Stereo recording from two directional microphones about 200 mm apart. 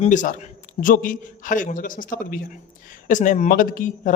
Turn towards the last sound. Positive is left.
turn(degrees=45)  # may be behind; listen again after turning